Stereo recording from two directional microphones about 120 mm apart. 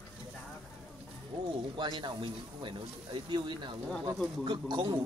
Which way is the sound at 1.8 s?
40° right (ahead or behind).